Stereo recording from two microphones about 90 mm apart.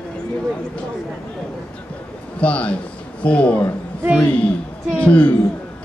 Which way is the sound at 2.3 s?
15° left (ahead or behind).